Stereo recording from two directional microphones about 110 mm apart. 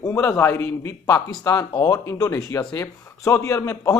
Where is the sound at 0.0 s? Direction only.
30° left (ahead or behind).